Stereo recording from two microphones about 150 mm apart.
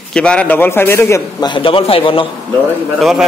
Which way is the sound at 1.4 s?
35° left (ahead or behind).